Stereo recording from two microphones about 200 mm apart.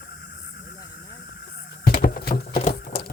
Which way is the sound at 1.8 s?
45° left (ahead or behind).